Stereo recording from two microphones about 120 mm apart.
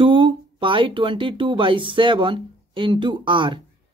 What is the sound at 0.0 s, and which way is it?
Speech, 45° right (ahead or behind).